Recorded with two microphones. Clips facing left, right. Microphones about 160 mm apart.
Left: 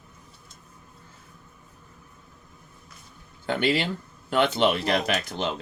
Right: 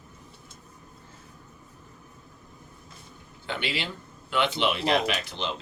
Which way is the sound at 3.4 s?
45° left (ahead or behind).